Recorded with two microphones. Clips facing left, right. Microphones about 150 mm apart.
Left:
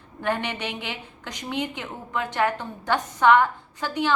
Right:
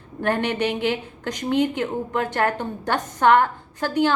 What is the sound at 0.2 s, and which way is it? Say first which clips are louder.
A woman's voice: right 5 dB; 50° right (ahead or behind).